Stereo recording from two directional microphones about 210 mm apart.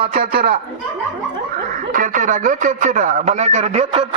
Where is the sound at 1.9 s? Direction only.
40° right (ahead or behind).